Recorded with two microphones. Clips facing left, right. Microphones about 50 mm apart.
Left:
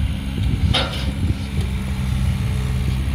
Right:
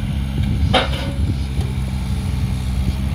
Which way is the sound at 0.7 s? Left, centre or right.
Right.